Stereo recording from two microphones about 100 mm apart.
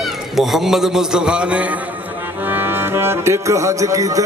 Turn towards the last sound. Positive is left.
turn(degrees=-35)  # may be behind; listen again after turning